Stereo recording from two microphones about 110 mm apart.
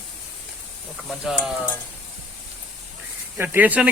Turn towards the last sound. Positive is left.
turn(degrees=-15)  # may be behind; listen again after turning